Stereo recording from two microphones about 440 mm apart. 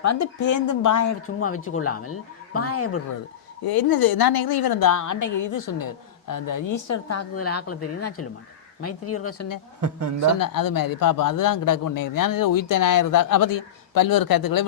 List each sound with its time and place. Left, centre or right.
0.0 s speech: left
3.6 s a woman's voice: left
9.8 s a woman's voice: right
10.4 s a woman's voice: left